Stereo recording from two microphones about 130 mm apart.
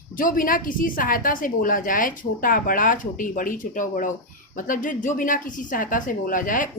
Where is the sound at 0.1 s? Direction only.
90° left.